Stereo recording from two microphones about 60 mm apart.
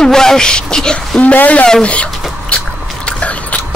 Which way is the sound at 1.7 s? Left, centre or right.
Centre.